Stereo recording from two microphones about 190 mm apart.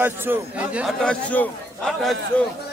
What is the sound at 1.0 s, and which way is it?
Speech, 5° left (ahead or behind).